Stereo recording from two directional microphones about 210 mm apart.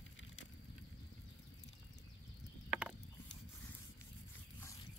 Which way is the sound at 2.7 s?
5° right (ahead or behind).